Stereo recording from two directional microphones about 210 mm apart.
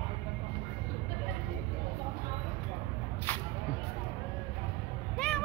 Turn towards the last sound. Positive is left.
turn(degrees=5)  # may be behind; listen again after turning